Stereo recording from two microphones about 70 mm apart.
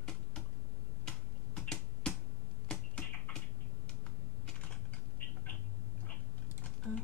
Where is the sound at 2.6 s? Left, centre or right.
Centre.